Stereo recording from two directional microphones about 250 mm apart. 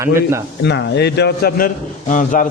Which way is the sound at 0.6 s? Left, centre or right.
Left.